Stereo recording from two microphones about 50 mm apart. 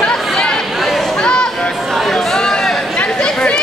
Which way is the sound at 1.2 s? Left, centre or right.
Centre.